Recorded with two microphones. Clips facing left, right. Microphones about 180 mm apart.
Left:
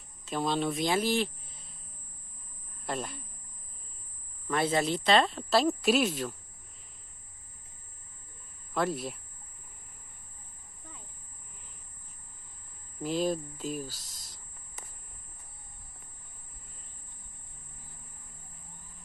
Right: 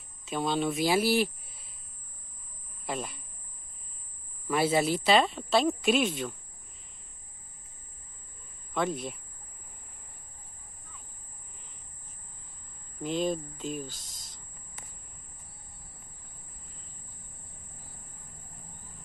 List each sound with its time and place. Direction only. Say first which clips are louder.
0.2 s speech: right 1 dB; centre (ahead or behind)
2.9 s a woman's voice: even; centre (ahead or behind)
4.5 s a woman's voice: right 2 dB; 10° right (ahead or behind)
8.7 s a woman's voice: even; centre (ahead or behind)
13.0 s a woman's voice: even; 5° left (ahead or behind)
13.9 s speech: right 1 dB; 45° right (ahead or behind)